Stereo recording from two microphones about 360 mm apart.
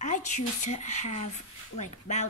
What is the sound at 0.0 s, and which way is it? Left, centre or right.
A woman's voice, centre.